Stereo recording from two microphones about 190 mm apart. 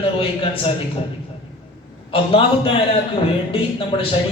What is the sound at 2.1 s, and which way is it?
Speech, 30° left (ahead or behind).